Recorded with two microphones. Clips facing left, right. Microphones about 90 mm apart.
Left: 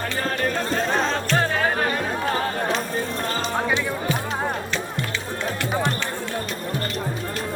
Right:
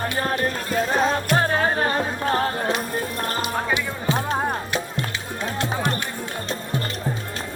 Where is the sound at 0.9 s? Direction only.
5° right (ahead or behind).